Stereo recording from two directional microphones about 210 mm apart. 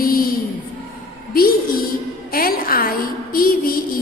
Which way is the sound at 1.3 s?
45° left (ahead or behind).